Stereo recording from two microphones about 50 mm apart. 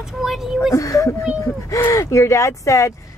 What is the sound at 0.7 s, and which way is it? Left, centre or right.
Speech, left.